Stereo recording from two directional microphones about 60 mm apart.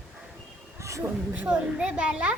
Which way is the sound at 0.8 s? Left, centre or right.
Right.